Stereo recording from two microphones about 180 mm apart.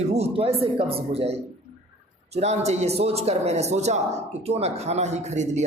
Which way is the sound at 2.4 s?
35° right (ahead or behind).